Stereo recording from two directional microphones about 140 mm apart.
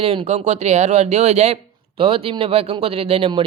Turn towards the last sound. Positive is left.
turn(degrees=-45)  # may be behind; listen again after turning